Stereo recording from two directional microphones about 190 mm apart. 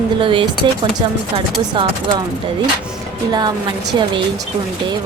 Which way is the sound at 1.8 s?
25° right (ahead or behind).